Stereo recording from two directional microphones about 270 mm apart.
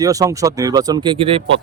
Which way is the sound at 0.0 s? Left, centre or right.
Centre.